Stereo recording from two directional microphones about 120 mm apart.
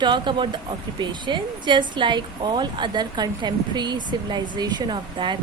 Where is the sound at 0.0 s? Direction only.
40° right (ahead or behind).